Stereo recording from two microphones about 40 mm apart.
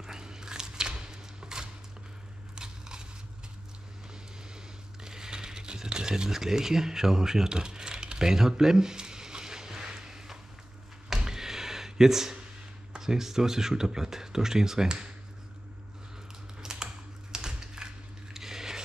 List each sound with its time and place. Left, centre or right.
0.0 s a sound: centre
2.5 s biting: centre
5.0 s a sound: centre
12.9 s speech: centre
16.6 s typing: centre
18.3 s biting: centre